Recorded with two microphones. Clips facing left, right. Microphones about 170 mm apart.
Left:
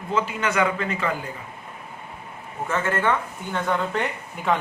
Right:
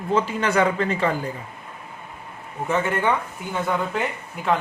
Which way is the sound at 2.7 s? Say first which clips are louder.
Right 1 dB; 15° right (ahead or behind).